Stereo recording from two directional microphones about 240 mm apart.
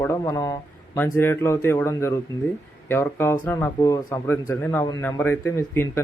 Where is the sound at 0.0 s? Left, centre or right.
Centre.